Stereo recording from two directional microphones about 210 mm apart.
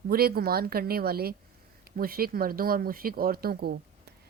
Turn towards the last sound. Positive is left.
turn(degrees=-45)  # may be behind; listen again after turning